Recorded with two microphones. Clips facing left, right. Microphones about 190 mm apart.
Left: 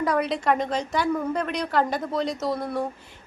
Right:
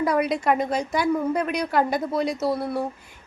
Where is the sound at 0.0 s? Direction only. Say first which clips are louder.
Right 2 dB; 10° right (ahead or behind).